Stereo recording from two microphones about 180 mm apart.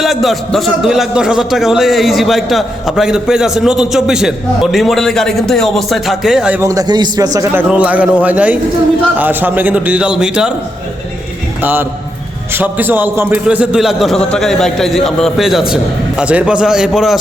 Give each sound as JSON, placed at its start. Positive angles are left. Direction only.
{"t": 0.0, "sound": "a man's voice", "side_deg": 0}
{"t": 6.6, "sound": "a man's voice", "side_deg": -20}
{"t": 7.3, "sound": "a man's voice", "side_deg": -10}
{"t": 11.6, "sound": "a man's voice", "side_deg": -10}